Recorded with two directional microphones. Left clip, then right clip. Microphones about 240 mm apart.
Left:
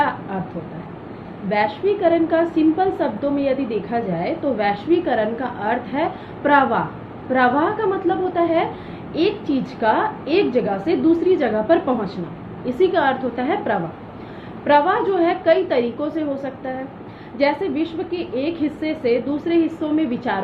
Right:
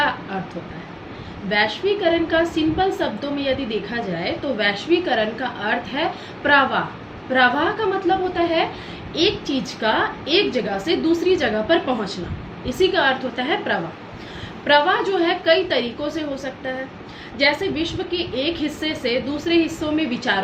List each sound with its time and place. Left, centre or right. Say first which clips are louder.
1.5 s a woman's voice: even; centre